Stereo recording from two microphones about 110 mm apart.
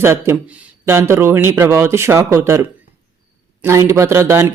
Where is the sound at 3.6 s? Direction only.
25° right (ahead or behind).